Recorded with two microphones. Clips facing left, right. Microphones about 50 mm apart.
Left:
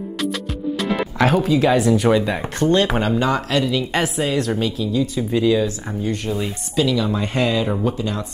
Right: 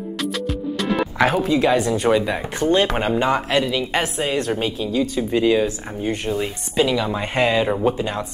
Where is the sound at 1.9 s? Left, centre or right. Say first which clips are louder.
Left 1 dB; centre; by 3.6 s right.